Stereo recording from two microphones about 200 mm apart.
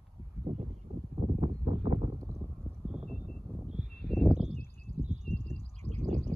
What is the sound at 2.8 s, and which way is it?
Vehicle, 5° right (ahead or behind).